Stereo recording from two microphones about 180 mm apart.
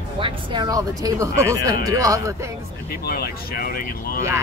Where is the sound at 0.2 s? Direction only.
25° right (ahead or behind).